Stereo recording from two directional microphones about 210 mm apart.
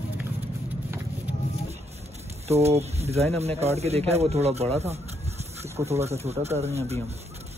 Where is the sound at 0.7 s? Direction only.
10° right (ahead or behind).